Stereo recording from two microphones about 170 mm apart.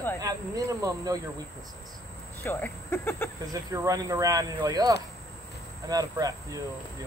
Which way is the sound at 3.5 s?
20° right (ahead or behind).